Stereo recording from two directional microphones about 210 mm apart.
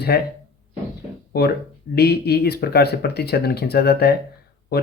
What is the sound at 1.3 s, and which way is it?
Speech, 50° left (ahead or behind).